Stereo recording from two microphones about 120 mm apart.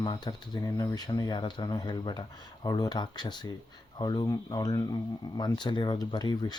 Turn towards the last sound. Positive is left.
turn(degrees=35)  # may be behind; listen again after turning